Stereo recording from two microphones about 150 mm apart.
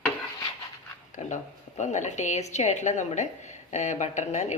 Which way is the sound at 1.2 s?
55° left (ahead or behind).